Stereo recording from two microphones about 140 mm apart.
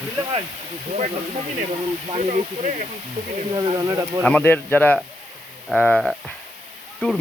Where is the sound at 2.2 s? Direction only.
60° right (ahead or behind).